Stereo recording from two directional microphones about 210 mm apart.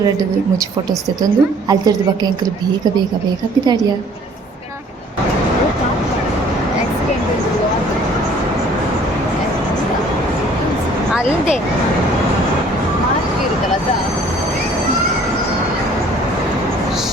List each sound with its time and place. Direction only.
1.2 s a woman's voice: 20° right (ahead or behind)